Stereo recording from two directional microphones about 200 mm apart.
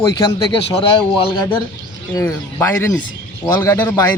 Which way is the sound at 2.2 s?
15° left (ahead or behind).